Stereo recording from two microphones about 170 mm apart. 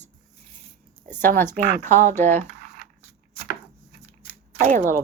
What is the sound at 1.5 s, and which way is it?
Speech, 50° right (ahead or behind).